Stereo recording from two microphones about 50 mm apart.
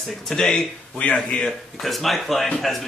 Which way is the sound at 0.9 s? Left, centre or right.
Left.